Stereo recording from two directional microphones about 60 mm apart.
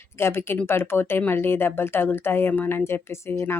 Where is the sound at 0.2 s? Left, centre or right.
Left.